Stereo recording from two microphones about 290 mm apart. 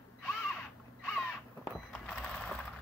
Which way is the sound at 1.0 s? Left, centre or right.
Centre.